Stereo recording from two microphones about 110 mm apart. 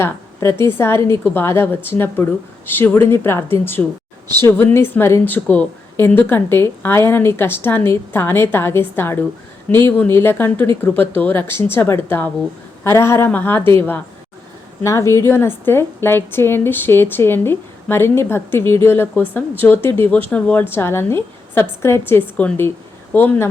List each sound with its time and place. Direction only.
0.0 s a woman's voice: 25° left (ahead or behind)
14.8 s a woman's voice: 25° left (ahead or behind)